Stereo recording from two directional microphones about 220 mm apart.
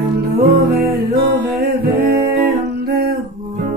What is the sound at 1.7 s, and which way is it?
Music, 45° right (ahead or behind).